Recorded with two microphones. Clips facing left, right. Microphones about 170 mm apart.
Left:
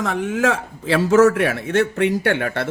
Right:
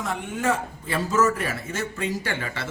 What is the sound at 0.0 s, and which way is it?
A man's voice, 90° left.